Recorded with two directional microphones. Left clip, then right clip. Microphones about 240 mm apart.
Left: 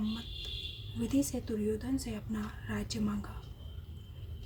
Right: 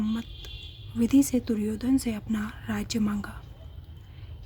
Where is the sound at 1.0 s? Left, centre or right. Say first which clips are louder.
Right 10 dB; right.